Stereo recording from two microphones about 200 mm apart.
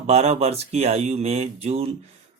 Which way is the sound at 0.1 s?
30° right (ahead or behind).